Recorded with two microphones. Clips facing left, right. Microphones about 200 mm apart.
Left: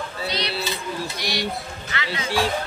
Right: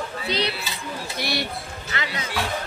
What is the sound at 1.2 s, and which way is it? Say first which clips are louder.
Speech: right 1 dB; 55° right (ahead or behind).